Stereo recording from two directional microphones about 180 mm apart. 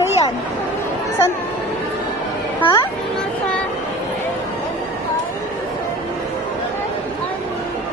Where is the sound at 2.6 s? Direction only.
30° left (ahead or behind).